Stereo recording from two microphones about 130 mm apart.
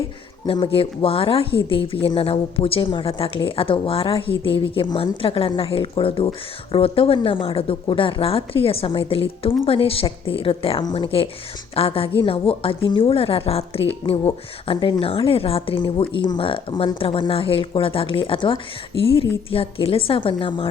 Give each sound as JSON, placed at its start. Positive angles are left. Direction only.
{"t": 0.4, "sound": "speech", "side_deg": 45}